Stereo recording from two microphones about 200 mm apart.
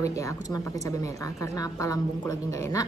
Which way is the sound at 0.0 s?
15° left (ahead or behind).